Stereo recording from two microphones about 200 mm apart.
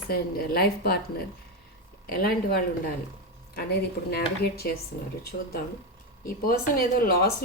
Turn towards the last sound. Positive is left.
turn(degrees=50)  # may be behind; listen again after turning